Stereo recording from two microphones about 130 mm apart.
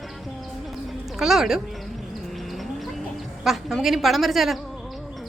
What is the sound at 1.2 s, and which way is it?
Speech, 5° right (ahead or behind).